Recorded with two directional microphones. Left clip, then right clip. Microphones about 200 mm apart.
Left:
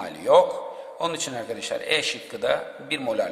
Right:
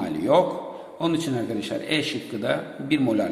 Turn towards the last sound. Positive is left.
turn(degrees=15)  # may be behind; listen again after turning